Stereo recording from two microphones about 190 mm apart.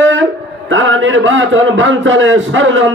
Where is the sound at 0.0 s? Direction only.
90° right.